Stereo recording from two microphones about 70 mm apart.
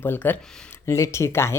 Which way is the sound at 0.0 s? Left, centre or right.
Left.